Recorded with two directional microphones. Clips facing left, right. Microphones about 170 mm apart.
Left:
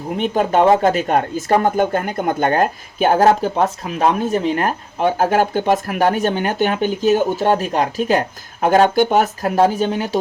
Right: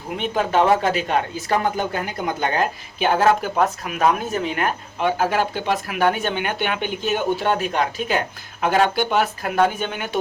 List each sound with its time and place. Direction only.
0.2 s speech: 35° left (ahead or behind)
3.5 s speech: 30° left (ahead or behind)